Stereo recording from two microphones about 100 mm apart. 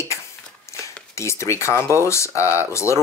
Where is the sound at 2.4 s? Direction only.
20° right (ahead or behind).